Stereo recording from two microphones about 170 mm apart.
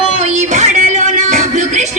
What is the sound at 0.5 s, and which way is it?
Music, 45° right (ahead or behind).